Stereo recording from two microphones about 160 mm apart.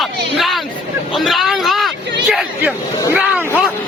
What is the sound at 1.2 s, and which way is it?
Vehicle, centre (ahead or behind).